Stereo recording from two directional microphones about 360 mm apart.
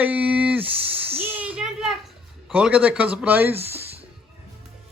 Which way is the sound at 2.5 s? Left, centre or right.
Centre.